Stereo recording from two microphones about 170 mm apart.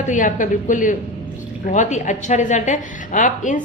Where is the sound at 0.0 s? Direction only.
50° left (ahead or behind).